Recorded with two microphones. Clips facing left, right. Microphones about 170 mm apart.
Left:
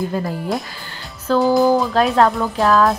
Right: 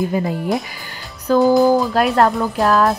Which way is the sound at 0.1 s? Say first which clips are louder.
Right 3 dB; 5° right (ahead or behind).